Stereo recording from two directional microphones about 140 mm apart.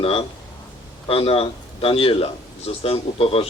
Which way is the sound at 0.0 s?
45° left (ahead or behind).